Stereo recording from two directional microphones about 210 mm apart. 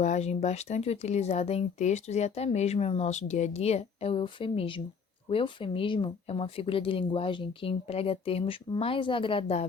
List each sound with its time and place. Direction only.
0.0 s speech: 35° left (ahead or behind)